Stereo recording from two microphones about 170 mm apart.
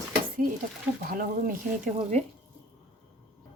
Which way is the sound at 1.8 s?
40° right (ahead or behind).